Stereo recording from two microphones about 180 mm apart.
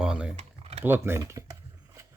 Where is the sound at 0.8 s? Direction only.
15° right (ahead or behind).